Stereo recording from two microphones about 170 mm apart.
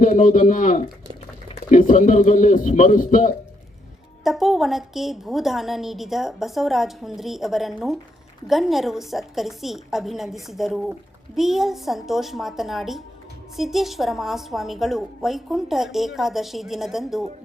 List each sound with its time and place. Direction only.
0.0 s a man's voice: 50° left (ahead or behind)
4.2 s a woman's voice: centre (ahead or behind)